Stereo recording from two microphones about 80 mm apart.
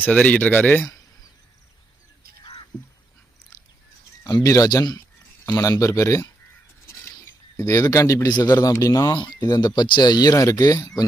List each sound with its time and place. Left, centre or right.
0.0 s speech: centre
4.2 s a sound: left
4.4 s speech: left
5.5 s speech: left
7.6 s speech: left
9.1 s speech: left